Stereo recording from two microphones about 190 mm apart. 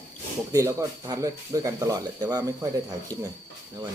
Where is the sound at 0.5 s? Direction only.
15° right (ahead or behind).